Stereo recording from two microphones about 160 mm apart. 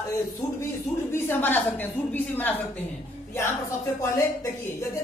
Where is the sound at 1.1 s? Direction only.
15° left (ahead or behind).